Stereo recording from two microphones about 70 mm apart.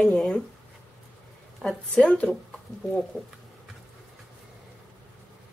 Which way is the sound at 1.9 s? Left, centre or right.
Centre.